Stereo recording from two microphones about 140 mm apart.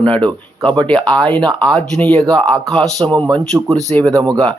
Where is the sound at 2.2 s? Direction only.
Centre (ahead or behind).